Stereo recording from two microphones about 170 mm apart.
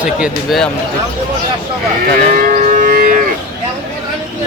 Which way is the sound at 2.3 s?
50° right (ahead or behind).